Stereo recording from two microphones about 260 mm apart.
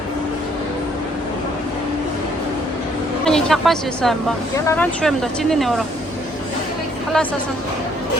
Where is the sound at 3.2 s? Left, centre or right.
Centre.